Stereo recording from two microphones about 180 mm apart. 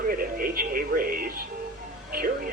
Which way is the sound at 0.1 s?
55° right (ahead or behind).